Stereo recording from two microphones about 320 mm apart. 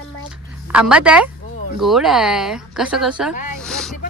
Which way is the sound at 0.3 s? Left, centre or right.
Centre.